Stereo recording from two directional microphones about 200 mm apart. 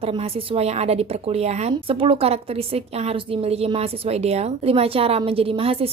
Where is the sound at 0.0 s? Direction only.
30° right (ahead or behind).